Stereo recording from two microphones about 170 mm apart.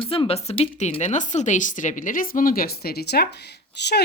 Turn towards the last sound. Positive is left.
turn(degrees=90)